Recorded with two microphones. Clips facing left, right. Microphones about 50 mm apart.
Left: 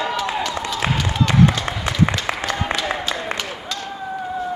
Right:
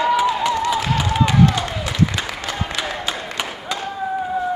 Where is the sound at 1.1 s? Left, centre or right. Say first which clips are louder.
Even; centre.